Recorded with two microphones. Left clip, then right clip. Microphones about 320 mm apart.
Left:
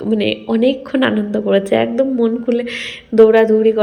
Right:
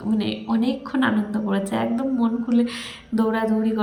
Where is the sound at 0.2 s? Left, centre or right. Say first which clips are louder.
Left 10 dB; centre.